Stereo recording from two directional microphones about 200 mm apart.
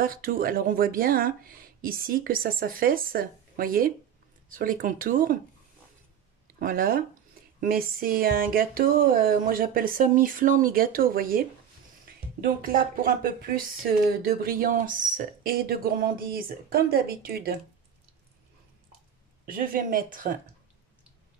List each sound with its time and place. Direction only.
0.0 s speech: 45° right (ahead or behind)
6.4 s speech: 45° right (ahead or behind)
19.4 s speech: 45° right (ahead or behind)